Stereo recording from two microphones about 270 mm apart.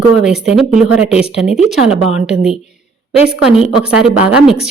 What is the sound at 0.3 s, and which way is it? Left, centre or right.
A woman's voice, centre.